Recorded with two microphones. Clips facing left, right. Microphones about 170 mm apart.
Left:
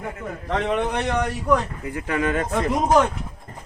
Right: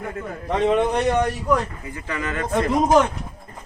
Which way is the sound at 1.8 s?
60° left (ahead or behind).